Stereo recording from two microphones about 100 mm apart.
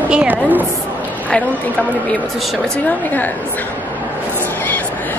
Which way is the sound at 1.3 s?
15° left (ahead or behind).